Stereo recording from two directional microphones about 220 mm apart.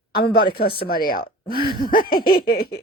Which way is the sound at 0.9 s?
40° left (ahead or behind).